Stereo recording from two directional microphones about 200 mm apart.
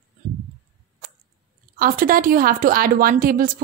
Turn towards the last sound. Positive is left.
turn(degrees=-45)  # may be behind; listen again after turning